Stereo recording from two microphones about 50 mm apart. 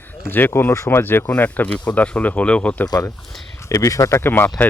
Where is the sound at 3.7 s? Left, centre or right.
Left.